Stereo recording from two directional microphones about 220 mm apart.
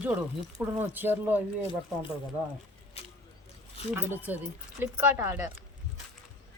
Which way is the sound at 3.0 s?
25° left (ahead or behind).